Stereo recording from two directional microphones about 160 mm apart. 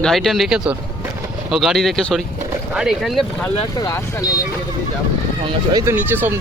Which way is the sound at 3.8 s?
20° left (ahead or behind).